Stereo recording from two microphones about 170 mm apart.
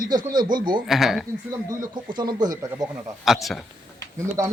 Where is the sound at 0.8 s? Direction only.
Centre (ahead or behind).